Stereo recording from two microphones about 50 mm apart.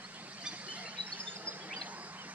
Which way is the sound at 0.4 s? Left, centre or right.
Right.